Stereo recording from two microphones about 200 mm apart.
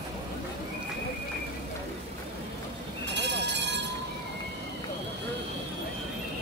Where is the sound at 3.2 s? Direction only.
60° right (ahead or behind).